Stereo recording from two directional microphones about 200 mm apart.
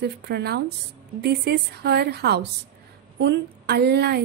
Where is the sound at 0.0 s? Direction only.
55° right (ahead or behind).